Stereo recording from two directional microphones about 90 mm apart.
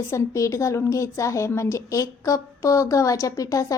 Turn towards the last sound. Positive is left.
turn(degrees=40)  # may be behind; listen again after turning